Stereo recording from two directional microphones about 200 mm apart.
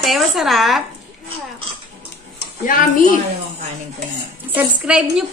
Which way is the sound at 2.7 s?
40° left (ahead or behind).